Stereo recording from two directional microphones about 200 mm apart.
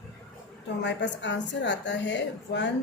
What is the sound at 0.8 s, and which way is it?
A woman's voice, 60° left (ahead or behind).